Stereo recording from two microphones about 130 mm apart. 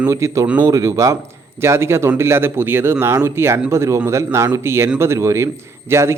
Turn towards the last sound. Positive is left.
turn(degrees=-20)  # may be behind; listen again after turning